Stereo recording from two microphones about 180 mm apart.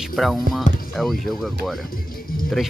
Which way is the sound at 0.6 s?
45° left (ahead or behind).